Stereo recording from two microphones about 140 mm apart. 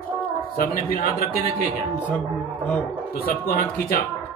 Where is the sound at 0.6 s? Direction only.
90° left.